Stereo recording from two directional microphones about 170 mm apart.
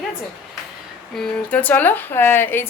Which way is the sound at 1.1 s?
5° left (ahead or behind).